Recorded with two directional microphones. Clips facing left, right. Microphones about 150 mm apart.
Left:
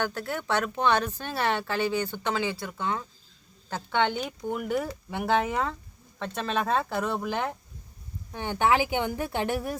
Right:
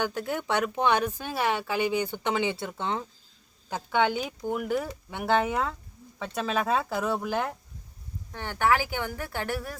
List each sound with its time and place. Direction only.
0.0 s speech: 15° right (ahead or behind)
3.7 s speech: 10° right (ahead or behind)
8.3 s speech: 15° left (ahead or behind)